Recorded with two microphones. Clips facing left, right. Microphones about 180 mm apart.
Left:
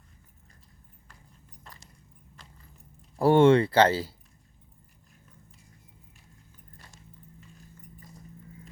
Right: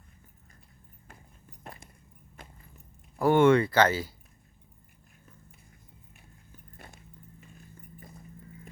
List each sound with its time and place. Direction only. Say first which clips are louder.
1.0 s a sound: right 5 dB; 55° right (ahead or behind)
3.2 s speech: left 2 dB; 30° left (ahead or behind)
6.7 s horse: right 5 dB; 55° right (ahead or behind)